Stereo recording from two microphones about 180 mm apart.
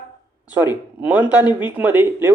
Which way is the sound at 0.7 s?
10° right (ahead or behind).